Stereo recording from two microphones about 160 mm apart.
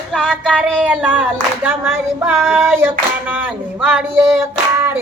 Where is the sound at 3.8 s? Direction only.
Centre (ahead or behind).